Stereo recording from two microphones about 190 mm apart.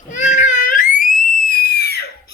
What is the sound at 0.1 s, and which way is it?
Baby cry, 40° left (ahead or behind).